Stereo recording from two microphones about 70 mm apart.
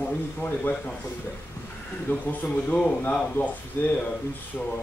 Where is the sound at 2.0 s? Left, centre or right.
Left.